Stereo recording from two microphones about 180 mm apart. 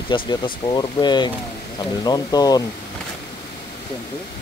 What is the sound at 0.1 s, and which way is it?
Speech, 25° left (ahead or behind).